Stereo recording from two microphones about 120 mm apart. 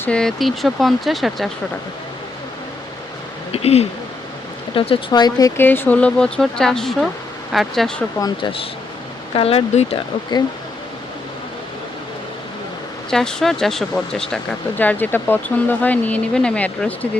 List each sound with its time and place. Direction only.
0.0 s speech: 5° left (ahead or behind)
3.5 s speech: 60° left (ahead or behind)
4.7 s speech: 45° left (ahead or behind)
5.5 s speech: 15° left (ahead or behind)
8.2 s speech: 45° left (ahead or behind)
13.1 s speech: 5° left (ahead or behind)
14.8 s speech: 15° left (ahead or behind)